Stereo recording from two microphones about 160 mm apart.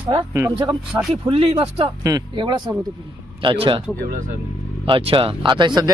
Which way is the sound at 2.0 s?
25° right (ahead or behind).